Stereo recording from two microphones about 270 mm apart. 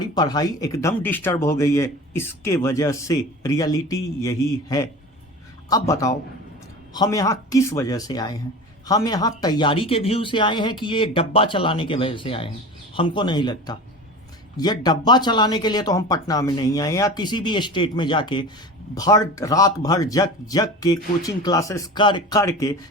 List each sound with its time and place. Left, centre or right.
0.1 s speech: centre